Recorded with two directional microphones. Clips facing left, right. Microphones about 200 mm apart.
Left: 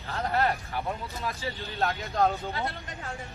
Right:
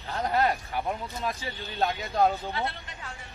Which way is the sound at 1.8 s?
15° right (ahead or behind).